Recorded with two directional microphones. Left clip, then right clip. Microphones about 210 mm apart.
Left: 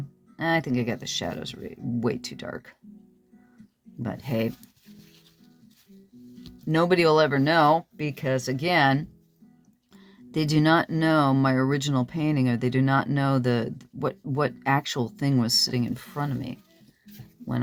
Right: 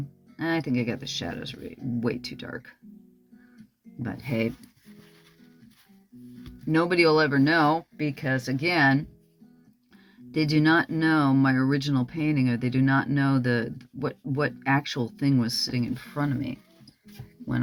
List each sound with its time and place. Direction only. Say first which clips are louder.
0.3 s speech: left 2 dB; 50° left (ahead or behind)
4.0 s speech: left 1 dB; 40° left (ahead or behind)
6.7 s speech: left 1 dB; 50° left (ahead or behind)
10.3 s speech: even; 55° left (ahead or behind)
16.0 s speech: right 2 dB; 30° left (ahead or behind)